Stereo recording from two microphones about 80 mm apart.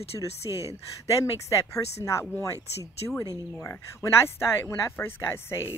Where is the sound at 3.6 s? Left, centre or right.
Left.